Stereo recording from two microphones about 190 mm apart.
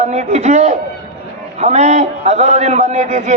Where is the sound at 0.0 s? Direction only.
40° right (ahead or behind).